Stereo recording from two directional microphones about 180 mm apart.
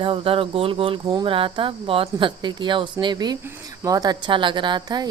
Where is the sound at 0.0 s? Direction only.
30° right (ahead or behind).